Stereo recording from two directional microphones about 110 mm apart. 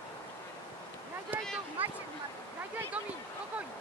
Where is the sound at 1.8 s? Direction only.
15° right (ahead or behind).